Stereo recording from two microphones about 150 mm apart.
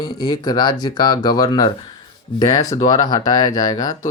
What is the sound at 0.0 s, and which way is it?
Speech, 25° left (ahead or behind).